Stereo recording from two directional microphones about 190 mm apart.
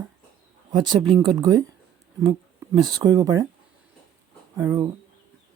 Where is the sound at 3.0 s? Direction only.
20° right (ahead or behind).